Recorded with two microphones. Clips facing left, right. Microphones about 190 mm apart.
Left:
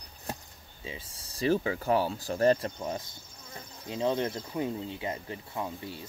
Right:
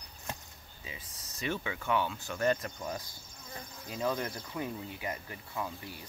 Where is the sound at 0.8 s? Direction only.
30° left (ahead or behind).